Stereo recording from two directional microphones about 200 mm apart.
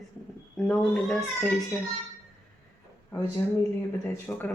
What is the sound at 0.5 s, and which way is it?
A child's voice, centre (ahead or behind).